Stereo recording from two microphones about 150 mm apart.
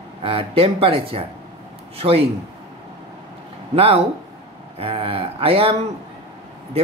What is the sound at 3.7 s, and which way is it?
Speech, 40° right (ahead or behind).